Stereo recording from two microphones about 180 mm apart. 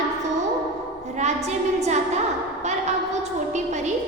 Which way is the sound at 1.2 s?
40° right (ahead or behind).